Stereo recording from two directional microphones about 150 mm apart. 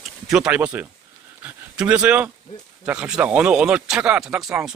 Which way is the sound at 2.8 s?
10° right (ahead or behind).